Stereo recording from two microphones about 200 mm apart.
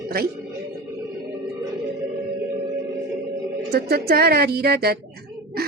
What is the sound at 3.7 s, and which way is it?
A woman's voice, 50° right (ahead or behind).